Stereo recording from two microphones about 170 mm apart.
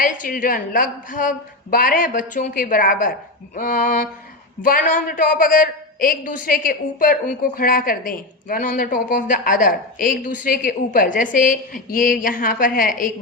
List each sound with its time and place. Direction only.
0.0 s a woman's voice: 50° left (ahead or behind)